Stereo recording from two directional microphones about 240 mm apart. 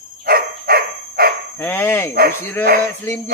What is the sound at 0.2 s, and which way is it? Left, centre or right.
Dog, right.